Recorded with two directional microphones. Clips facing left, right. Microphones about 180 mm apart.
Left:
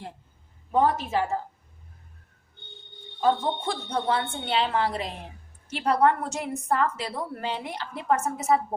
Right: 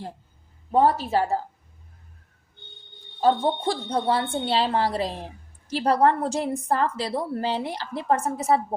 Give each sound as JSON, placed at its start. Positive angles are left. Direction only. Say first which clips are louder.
{"t": 0.7, "sound": "a woman's voice", "louder": "right 3 dB", "side_deg": -35}
{"t": 3.2, "sound": "a woman's voice", "louder": "right 3 dB", "side_deg": -35}